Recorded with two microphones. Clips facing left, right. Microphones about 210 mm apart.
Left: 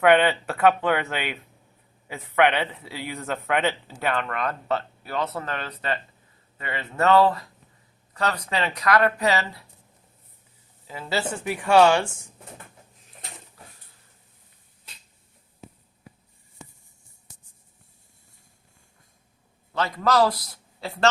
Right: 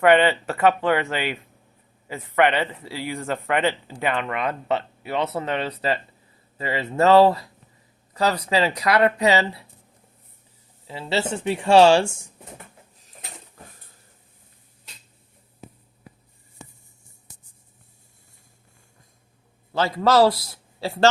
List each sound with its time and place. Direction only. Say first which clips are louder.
0.0 s a man's voice: right 2 dB; 5° right (ahead or behind)
5.0 s speech: right 6 dB; 25° right (ahead or behind)
10.8 s speech: right 3 dB; 25° right (ahead or behind)
19.7 s a man's voice: right 4 dB; 30° right (ahead or behind)